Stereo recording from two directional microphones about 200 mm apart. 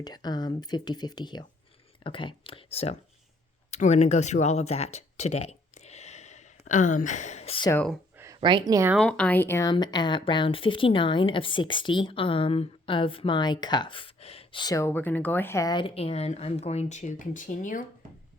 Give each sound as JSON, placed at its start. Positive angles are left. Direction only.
{"t": 0.0, "sound": "speech", "side_deg": 20}
{"t": 7.7, "sound": "speech", "side_deg": 10}
{"t": 8.2, "sound": "speech", "side_deg": -20}
{"t": 9.0, "sound": "speech", "side_deg": 5}